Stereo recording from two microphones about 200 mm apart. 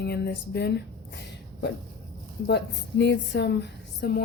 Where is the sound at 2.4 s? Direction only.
60° left (ahead or behind).